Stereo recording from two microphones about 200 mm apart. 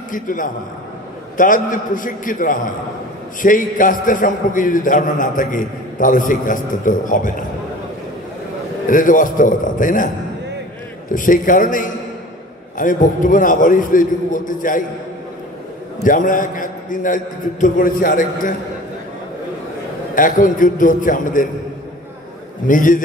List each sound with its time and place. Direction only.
0.1 s a man's voice: 40° left (ahead or behind)
8.8 s a man's voice: 40° left (ahead or behind)
11.1 s a man's voice: 40° left (ahead or behind)
16.0 s a man's voice: 40° left (ahead or behind)
20.2 s a man's voice: 40° left (ahead or behind)
22.7 s a man's voice: 40° left (ahead or behind)